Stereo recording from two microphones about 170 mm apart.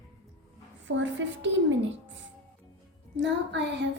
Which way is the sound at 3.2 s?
90° right.